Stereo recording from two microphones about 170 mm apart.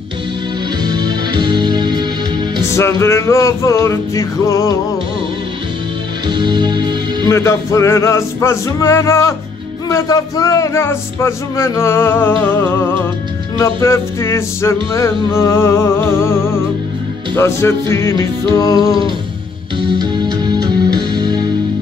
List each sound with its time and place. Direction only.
0.8 s music: 25° right (ahead or behind)
2.7 s speech: 15° left (ahead or behind)
6.2 s speech: 25° right (ahead or behind)
7.2 s speech: 15° left (ahead or behind)
18.5 s music: 20° left (ahead or behind)
20.0 s music: 25° right (ahead or behind)